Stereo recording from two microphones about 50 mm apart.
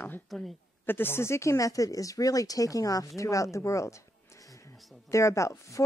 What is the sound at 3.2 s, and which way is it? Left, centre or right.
Speech, left.